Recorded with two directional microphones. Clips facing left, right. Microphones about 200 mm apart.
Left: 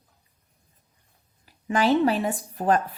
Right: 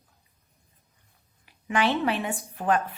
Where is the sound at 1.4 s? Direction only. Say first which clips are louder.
Left 2 dB; 40° left (ahead or behind).